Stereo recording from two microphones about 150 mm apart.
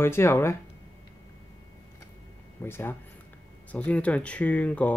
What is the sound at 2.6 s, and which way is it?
Speech, 15° left (ahead or behind).